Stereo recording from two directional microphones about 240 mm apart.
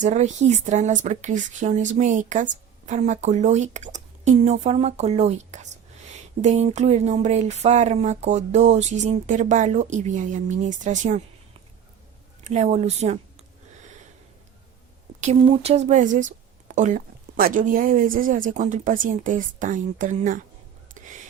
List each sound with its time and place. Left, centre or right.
0.0 s a woman's voice: right
12.5 s a woman's voice: right
15.2 s a woman's voice: right